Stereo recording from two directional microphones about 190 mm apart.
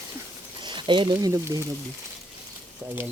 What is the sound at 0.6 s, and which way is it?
Speech, 25° right (ahead or behind).